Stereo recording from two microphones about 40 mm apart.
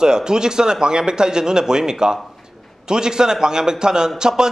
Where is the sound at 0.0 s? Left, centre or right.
Centre.